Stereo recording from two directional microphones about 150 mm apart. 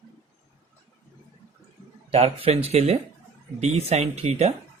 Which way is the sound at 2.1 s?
40° right (ahead or behind).